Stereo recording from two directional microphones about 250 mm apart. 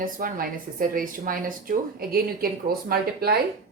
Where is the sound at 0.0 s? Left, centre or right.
Right.